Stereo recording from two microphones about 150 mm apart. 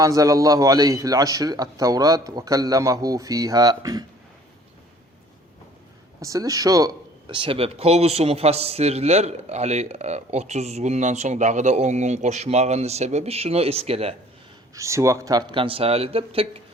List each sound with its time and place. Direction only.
0.0 s a man's voice: 20° right (ahead or behind)
6.2 s speech: 20° right (ahead or behind)
7.3 s a man's voice: 35° right (ahead or behind)
14.8 s speech: 20° right (ahead or behind); by 16.5 s 40° right (ahead or behind)